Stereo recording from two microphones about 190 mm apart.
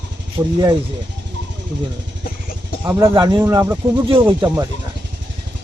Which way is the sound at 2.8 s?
15° right (ahead or behind).